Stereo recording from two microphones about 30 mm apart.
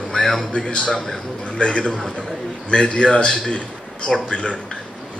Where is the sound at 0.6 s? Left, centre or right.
Left.